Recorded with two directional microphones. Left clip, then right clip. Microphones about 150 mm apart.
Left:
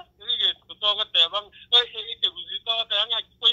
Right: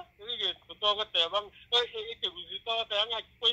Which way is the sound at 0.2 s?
30° right (ahead or behind).